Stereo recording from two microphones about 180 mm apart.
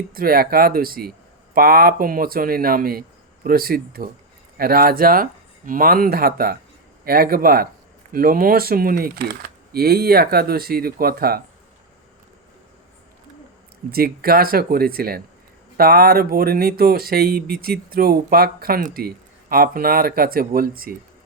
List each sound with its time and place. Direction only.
0.1 s speech: 55° right (ahead or behind)
13.9 s speech: 55° right (ahead or behind)